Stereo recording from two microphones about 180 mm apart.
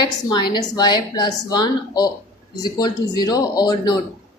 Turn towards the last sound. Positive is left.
turn(degrees=20)  # may be behind; listen again after turning